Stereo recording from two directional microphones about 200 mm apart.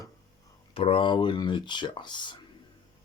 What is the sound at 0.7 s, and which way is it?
Speech, 25° left (ahead or behind).